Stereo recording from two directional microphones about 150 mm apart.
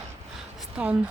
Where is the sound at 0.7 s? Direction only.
10° right (ahead or behind).